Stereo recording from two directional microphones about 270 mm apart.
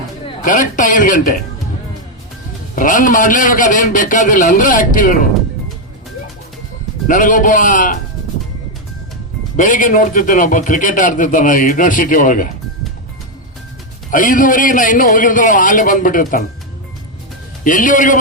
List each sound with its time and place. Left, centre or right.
0.4 s a man's voice: left
2.7 s a man's voice: left
7.1 s a man's voice: left
9.6 s a man's voice: left
14.1 s a man's voice: left
17.6 s a man's voice: left